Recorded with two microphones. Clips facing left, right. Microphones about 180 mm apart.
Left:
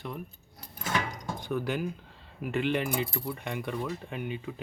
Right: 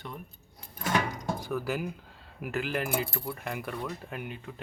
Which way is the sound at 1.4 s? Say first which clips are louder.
Left 4 dB; 5° right (ahead or behind).